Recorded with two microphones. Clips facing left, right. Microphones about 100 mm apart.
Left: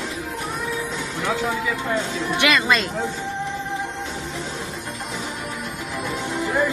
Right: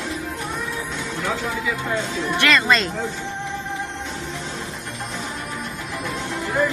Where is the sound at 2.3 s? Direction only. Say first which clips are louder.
Right 1 dB; 5° left (ahead or behind).